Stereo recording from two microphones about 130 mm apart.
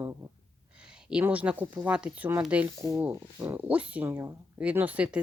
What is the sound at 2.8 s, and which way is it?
Speech, 25° right (ahead or behind).